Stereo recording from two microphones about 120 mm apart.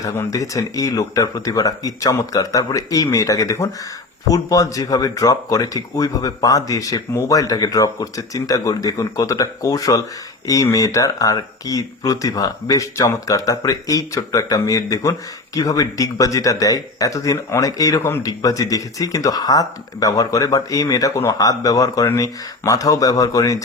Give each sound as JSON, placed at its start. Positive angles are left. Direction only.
{"t": 0.0, "sound": "speech", "side_deg": 30}